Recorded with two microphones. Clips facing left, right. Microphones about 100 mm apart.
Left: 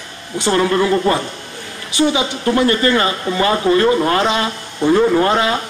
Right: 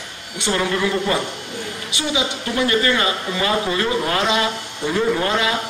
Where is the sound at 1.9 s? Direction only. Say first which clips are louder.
Left 8 dB; 40° left (ahead or behind).